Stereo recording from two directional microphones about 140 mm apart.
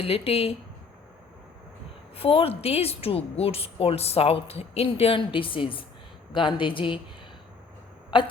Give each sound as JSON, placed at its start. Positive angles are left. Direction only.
{"t": 0.0, "sound": "a woman's voice", "side_deg": 45}
{"t": 2.1, "sound": "a woman's voice", "side_deg": 45}
{"t": 8.1, "sound": "speech", "side_deg": 35}